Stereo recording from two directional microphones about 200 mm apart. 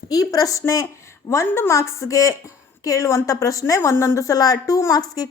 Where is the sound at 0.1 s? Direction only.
20° left (ahead or behind).